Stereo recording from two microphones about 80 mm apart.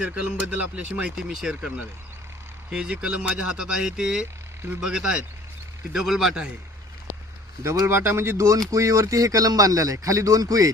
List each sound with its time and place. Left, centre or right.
0.0 s speech: centre
1.1 s speech: centre
2.7 s speech: centre
7.6 s speech: right